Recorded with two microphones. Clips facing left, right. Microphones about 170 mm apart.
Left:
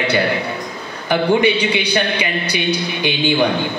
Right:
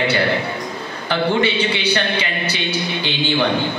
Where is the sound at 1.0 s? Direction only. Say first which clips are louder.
Left 4 dB; 15° left (ahead or behind).